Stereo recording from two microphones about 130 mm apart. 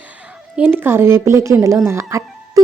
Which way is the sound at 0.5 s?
15° right (ahead or behind).